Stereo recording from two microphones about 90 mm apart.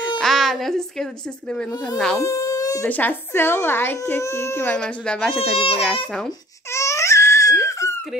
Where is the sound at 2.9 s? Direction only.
20° left (ahead or behind).